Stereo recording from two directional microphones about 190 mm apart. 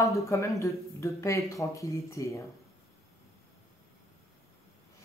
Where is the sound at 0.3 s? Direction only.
15° left (ahead or behind).